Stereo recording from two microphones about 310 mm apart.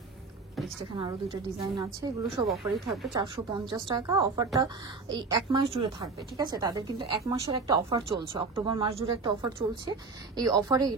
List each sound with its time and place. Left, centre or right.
0.9 s a woman's voice: centre
2.4 s speech: centre
3.2 s a woman's voice: centre